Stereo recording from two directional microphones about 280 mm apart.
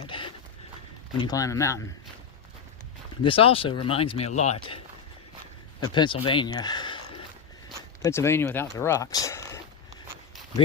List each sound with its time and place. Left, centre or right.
0.1 s a sound: centre
1.2 s speech: centre
3.2 s speech: centre
5.9 s speech: centre
8.0 s speech: centre